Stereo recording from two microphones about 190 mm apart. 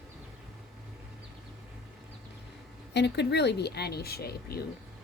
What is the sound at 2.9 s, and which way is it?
Speech, 65° left (ahead or behind).